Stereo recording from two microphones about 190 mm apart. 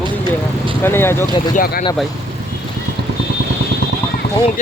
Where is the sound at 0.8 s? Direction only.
10° left (ahead or behind).